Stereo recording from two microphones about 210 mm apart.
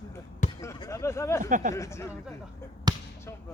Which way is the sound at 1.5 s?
40° right (ahead or behind).